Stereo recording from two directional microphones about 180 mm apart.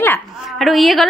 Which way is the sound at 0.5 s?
Centre (ahead or behind).